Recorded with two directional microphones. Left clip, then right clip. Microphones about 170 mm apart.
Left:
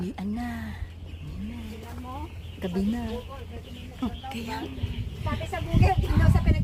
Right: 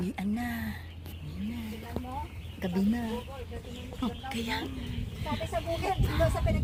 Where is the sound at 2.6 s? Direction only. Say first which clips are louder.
Left 2 dB; 10° left (ahead or behind).